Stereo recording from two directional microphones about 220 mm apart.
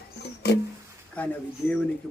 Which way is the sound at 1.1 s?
5° left (ahead or behind).